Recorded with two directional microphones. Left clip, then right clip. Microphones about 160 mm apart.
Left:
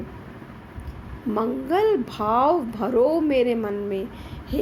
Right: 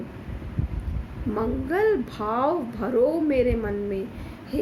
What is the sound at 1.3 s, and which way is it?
A woman's voice, 35° left (ahead or behind).